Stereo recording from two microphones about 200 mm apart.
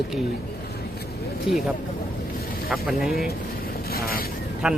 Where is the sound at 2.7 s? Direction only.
Centre (ahead or behind).